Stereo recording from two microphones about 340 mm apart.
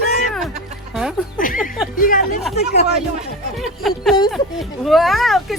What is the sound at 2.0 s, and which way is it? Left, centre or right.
Speech, left.